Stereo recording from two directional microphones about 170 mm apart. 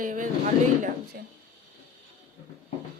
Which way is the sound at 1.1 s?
65° right (ahead or behind).